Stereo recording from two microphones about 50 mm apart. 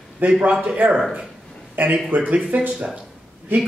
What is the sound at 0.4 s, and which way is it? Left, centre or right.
Speech, right.